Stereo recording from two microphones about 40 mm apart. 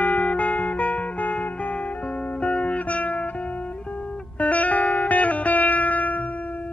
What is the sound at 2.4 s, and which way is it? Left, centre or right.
Music, left.